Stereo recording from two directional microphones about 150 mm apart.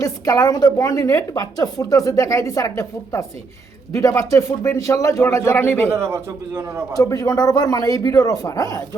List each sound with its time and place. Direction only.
0.0 s a woman's voice: 25° left (ahead or behind)
5.9 s a man's voice: 15° right (ahead or behind)
6.9 s a woman's voice: 25° left (ahead or behind)